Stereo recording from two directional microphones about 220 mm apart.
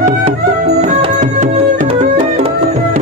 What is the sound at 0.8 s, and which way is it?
Music, 30° right (ahead or behind).